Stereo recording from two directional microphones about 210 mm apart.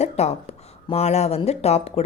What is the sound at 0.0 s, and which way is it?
A woman's voice, 30° left (ahead or behind).